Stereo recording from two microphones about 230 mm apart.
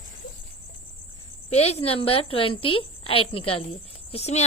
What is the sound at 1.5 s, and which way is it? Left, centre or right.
A woman's voice, left.